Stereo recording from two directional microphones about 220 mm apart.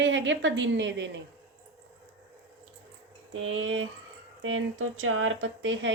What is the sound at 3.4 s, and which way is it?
Speech, 65° right (ahead or behind).